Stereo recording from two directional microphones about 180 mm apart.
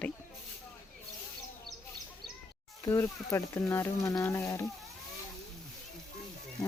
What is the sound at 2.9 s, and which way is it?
Speech, 15° left (ahead or behind).